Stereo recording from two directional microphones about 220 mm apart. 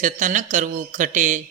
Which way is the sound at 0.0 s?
35° right (ahead or behind).